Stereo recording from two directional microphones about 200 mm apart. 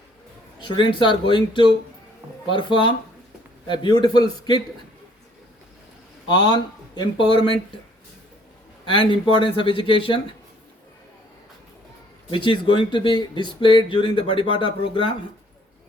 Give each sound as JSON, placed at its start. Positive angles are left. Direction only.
{"t": 0.6, "sound": "speech", "side_deg": 25}
{"t": 6.3, "sound": "speech", "side_deg": 20}
{"t": 8.9, "sound": "speech", "side_deg": 25}
{"t": 12.3, "sound": "speech", "side_deg": 25}